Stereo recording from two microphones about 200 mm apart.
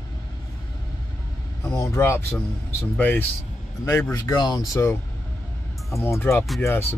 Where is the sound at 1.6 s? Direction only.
15° left (ahead or behind).